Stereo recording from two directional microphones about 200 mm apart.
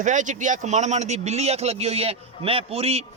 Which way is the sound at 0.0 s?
40° right (ahead or behind).